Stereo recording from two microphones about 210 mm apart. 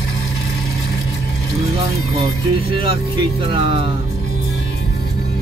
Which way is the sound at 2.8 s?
25° right (ahead or behind).